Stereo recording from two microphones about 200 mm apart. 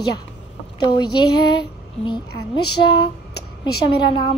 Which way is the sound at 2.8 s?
25° left (ahead or behind).